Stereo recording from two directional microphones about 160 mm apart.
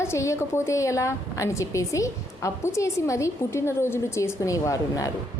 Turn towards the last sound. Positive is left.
turn(degrees=20)  # may be behind; listen again after turning